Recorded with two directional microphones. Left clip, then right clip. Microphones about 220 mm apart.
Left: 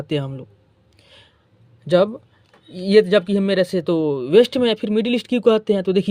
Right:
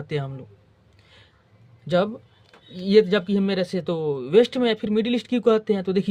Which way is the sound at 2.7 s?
30° left (ahead or behind).